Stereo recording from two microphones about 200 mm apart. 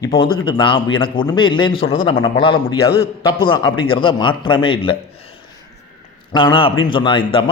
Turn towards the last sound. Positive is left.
turn(degrees=25)  # may be behind; listen again after turning